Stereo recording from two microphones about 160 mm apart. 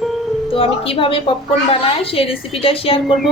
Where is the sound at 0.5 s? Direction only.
35° left (ahead or behind).